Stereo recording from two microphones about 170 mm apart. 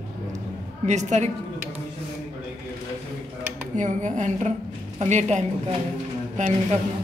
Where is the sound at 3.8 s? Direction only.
45° right (ahead or behind).